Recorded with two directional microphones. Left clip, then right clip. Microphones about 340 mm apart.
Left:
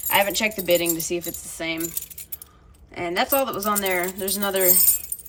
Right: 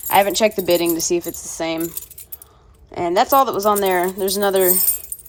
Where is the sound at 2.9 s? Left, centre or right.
Centre.